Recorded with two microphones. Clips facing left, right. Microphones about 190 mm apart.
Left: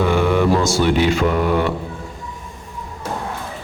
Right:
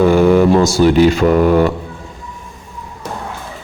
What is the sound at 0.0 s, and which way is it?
Speech, 40° right (ahead or behind).